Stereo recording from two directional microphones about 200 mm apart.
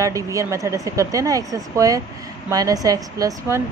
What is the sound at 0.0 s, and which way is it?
Speech, 15° right (ahead or behind).